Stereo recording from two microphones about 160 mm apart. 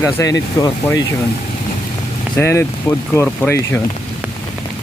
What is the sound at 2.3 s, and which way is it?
Speech, 15° left (ahead or behind).